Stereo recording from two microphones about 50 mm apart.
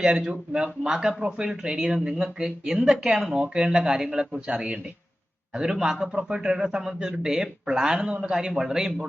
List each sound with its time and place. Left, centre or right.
0.0 s a man's voice: centre
5.8 s a man's voice: centre